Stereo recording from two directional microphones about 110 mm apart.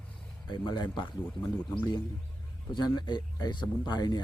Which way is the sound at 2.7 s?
40° left (ahead or behind).